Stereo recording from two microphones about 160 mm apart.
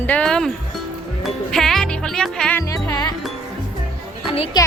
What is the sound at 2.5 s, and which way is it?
Music, 15° left (ahead or behind).